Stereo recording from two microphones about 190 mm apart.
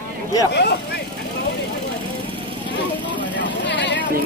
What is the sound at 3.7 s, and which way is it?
Vehicle, 70° left (ahead or behind).